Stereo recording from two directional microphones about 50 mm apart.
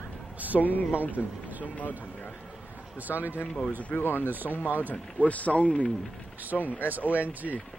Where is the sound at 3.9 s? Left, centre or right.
Left.